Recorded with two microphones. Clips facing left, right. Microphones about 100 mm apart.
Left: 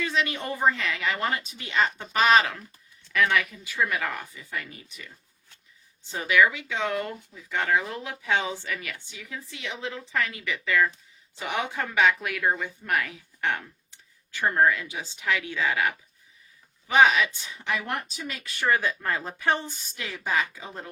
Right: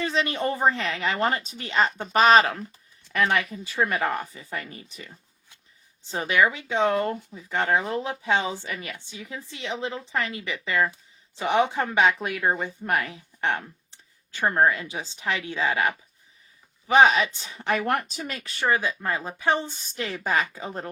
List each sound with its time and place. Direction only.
0.0 s a woman's voice: 35° right (ahead or behind)
6.1 s a woman's voice: 35° right (ahead or behind)
17.8 s speech: 55° right (ahead or behind)
18.3 s a woman's voice: 35° right (ahead or behind)
18.7 s speech: 20° right (ahead or behind)
20.0 s speech: 50° right (ahead or behind)